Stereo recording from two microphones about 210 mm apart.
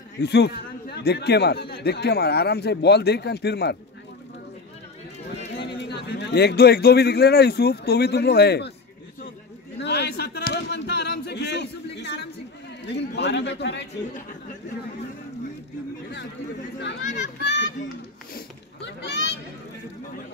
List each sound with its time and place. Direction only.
0.2 s a man's voice: 55° left (ahead or behind)
5.8 s a man's voice: 55° left (ahead or behind)
9.8 s a sound: 50° left (ahead or behind)
12.8 s a man's voice: 55° left (ahead or behind)
17.1 s children playing: 55° left (ahead or behind)
18.3 s a sound: 55° left (ahead or behind)